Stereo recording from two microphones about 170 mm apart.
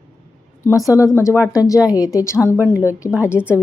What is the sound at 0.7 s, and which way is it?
A woman's voice, 20° left (ahead or behind).